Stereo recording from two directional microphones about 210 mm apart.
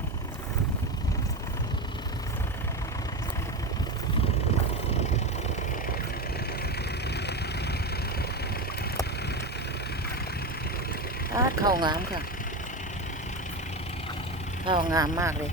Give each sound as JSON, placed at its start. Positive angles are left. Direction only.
{"t": 7.1, "sound": "vehicle", "side_deg": 50}
{"t": 11.3, "sound": "speech", "side_deg": -20}
{"t": 14.7, "sound": "speech", "side_deg": -20}